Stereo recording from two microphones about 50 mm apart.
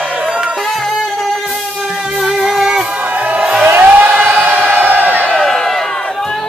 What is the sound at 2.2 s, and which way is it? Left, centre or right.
Music, centre.